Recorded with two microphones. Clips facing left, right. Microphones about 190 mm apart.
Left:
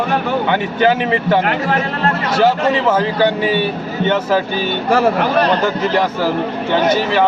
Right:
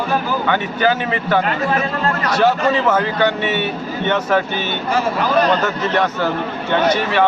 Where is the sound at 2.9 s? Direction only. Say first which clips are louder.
Left 2 dB; 30° left (ahead or behind).